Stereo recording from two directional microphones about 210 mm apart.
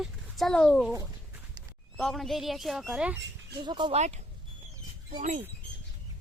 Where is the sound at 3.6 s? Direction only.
20° right (ahead or behind).